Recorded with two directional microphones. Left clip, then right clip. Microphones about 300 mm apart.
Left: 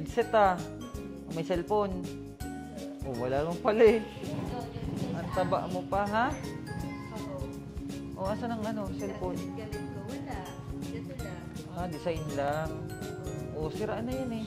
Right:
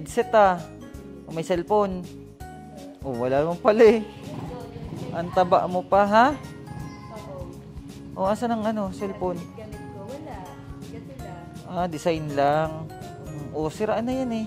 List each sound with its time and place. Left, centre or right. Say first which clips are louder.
0.1 s speech: right 7 dB; centre
3.1 s speech: right 8 dB; centre
5.1 s speech: right 11 dB; right
8.2 s speech: right 10 dB; right
11.7 s speech: right 10 dB; right